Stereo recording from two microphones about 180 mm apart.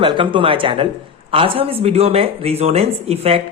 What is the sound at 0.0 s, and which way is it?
Speech, 30° right (ahead or behind).